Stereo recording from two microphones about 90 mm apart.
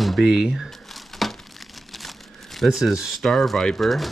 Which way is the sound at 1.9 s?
Centre (ahead or behind).